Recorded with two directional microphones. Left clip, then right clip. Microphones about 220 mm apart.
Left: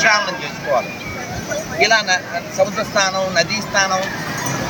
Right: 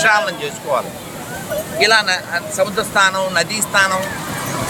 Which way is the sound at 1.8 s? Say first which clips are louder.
Right 1 dB; 30° right (ahead or behind).